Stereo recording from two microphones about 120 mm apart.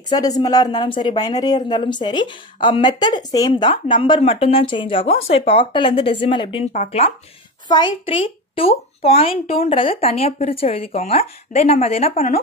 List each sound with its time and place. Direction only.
0.1 s speech: 30° left (ahead or behind)
3.7 s a woman's voice: 50° left (ahead or behind)
6.7 s speech: 75° left (ahead or behind)
7.6 s a woman's voice: 40° left (ahead or behind); by 12.3 s 60° left (ahead or behind)